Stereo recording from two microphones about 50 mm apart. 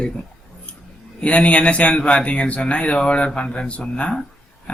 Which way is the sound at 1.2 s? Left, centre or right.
Left.